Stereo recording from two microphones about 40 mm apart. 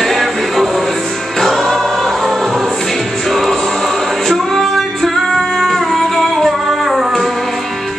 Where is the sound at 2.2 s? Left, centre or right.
Centre.